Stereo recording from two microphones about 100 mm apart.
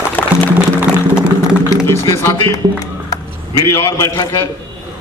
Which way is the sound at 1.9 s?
25° left (ahead or behind).